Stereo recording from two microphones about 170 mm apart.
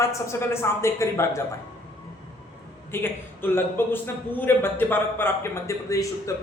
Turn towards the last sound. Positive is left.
turn(degrees=20)  # may be behind; listen again after turning